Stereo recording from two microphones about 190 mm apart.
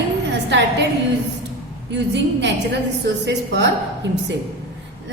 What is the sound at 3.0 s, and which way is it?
Speech, 65° right (ahead or behind).